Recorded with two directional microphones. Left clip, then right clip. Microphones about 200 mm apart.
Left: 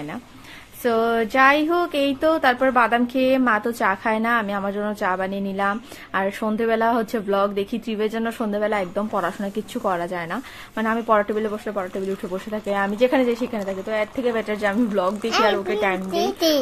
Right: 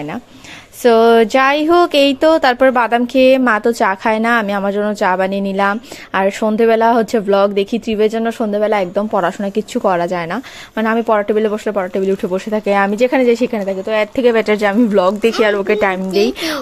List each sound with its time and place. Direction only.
0.8 s speech: 40° right (ahead or behind)